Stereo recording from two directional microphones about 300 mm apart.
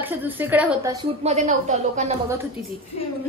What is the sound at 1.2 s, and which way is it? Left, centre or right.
Speech, right.